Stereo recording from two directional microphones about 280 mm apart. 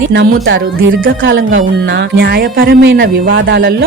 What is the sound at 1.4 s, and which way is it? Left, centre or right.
Speech, right.